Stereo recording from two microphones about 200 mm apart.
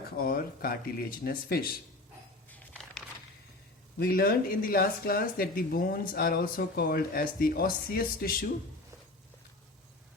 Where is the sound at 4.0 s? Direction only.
50° left (ahead or behind).